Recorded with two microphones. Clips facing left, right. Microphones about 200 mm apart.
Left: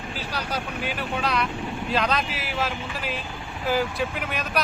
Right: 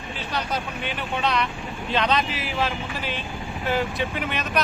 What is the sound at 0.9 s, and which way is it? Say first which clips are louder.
Speech: right 2 dB; 5° left (ahead or behind).